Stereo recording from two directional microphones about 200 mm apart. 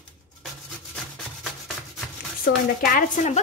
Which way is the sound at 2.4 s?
45° left (ahead or behind).